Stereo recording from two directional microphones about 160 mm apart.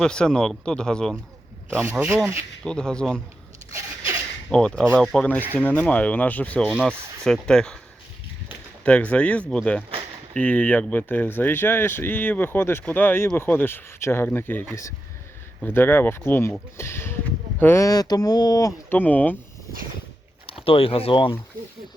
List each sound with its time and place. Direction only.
0.0 s speech: 5° left (ahead or behind)
1.8 s speech: 15° right (ahead or behind)
2.6 s speech: 5° left (ahead or behind)
3.7 s a sound: 20° right (ahead or behind)
4.4 s speech: 5° left (ahead or behind)
6.7 s speech: centre (ahead or behind)
8.8 s speech: 10° left (ahead or behind); by 18.7 s 25° left (ahead or behind)
18.9 s speech: 10° left (ahead or behind)
20.5 s speech: 35° left (ahead or behind)